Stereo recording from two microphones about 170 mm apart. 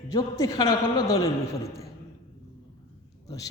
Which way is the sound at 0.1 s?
20° left (ahead or behind).